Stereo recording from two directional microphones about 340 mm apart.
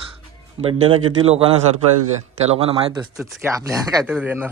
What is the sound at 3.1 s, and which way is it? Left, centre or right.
Speech, centre.